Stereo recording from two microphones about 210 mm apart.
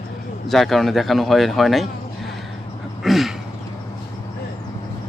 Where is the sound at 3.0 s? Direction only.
Centre (ahead or behind).